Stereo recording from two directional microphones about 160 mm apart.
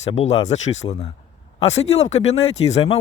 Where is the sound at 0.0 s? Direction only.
40° left (ahead or behind).